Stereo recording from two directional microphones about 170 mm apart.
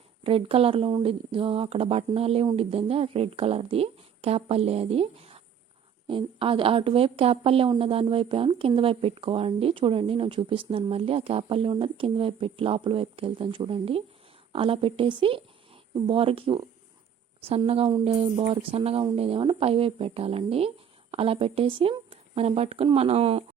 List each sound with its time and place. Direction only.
0.3 s a woman's voice: 35° right (ahead or behind)